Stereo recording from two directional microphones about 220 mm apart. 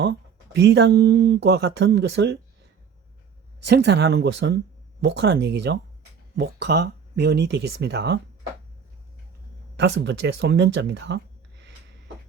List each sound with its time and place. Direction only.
0.0 s speech: 50° right (ahead or behind)
3.6 s speech: 50° right (ahead or behind)
9.7 s speech: 50° right (ahead or behind)